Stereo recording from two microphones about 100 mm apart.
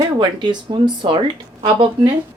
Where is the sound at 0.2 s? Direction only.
50° right (ahead or behind).